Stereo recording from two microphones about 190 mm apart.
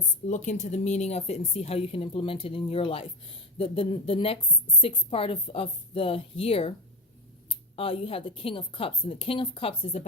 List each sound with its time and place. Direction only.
0.3 s a woman's voice: 40° left (ahead or behind)
7.8 s a woman's voice: 30° left (ahead or behind)